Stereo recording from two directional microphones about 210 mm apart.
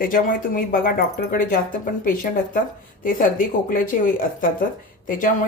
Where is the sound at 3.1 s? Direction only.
40° left (ahead or behind).